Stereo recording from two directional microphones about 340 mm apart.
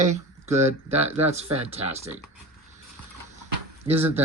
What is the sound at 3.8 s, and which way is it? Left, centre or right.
Speech, centre.